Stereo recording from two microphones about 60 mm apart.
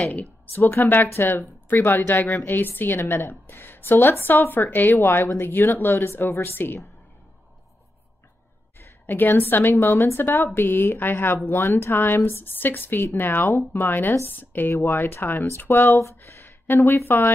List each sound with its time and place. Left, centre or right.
0.0 s a woman's voice: left
8.7 s a woman's voice: left
12.4 s a woman's voice: left
16.0 s a sound: left
17.0 s a woman's voice: left